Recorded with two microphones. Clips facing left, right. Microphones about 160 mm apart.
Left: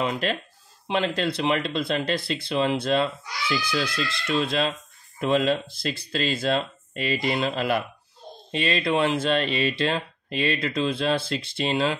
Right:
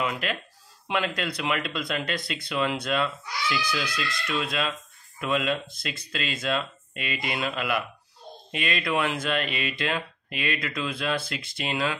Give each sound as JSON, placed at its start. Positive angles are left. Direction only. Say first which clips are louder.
{"t": 0.0, "sound": "speech", "louder": "left 3 dB", "side_deg": 30}